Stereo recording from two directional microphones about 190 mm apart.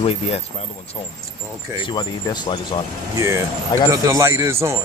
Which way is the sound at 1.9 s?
20° left (ahead or behind).